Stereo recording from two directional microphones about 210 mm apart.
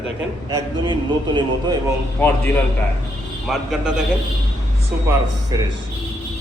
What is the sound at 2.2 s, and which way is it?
Speech, 10° left (ahead or behind).